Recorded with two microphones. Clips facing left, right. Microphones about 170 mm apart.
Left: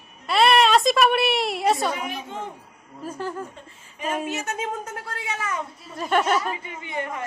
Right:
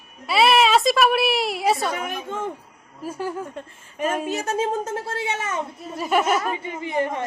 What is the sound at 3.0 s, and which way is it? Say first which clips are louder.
Speech: right 2 dB; 10° right (ahead or behind).